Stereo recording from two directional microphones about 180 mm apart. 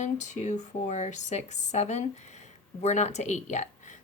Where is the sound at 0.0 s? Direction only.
40° left (ahead or behind).